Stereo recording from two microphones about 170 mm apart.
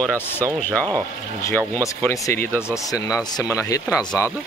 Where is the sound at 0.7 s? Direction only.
10° left (ahead or behind).